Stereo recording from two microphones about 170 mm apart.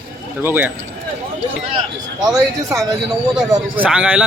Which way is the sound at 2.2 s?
20° right (ahead or behind).